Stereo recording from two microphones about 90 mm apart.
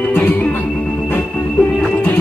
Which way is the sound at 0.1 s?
20° left (ahead or behind).